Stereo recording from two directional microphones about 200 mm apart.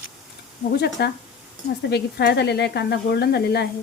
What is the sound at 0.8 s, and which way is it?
Speech, 55° left (ahead or behind).